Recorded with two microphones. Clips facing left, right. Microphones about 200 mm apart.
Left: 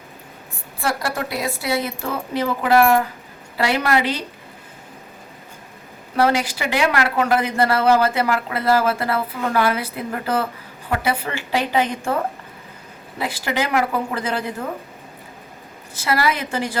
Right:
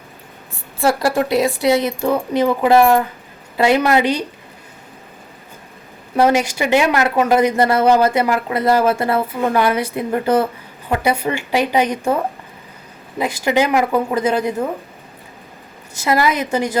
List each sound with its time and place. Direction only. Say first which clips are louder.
0.9 s speech: right 8 dB; 25° right (ahead or behind)
6.1 s a woman's voice: right 4 dB; 20° right (ahead or behind)
13.1 s speech: right 7 dB; 20° right (ahead or behind)
16.0 s speech: right 4 dB; 20° right (ahead or behind)